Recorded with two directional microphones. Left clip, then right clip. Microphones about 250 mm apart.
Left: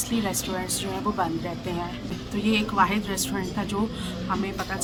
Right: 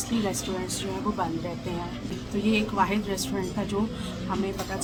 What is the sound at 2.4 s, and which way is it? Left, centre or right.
A woman's voice, centre.